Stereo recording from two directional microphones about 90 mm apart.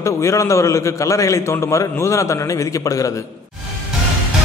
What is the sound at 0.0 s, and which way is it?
A man's voice, 35° left (ahead or behind).